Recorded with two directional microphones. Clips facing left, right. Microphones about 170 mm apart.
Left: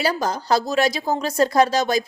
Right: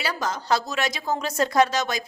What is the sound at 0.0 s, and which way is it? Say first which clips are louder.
Speech: left 6 dB; 35° left (ahead or behind).